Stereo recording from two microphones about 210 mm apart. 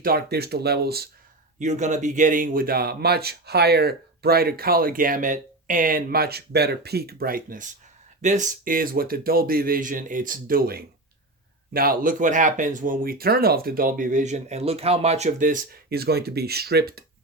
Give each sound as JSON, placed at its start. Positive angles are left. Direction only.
{"t": 0.0, "sound": "speech", "side_deg": -45}
{"t": 1.5, "sound": "speech", "side_deg": -35}